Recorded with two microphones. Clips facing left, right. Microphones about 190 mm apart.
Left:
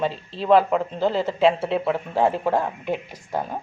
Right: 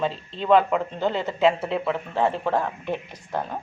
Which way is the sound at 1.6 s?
5° left (ahead or behind).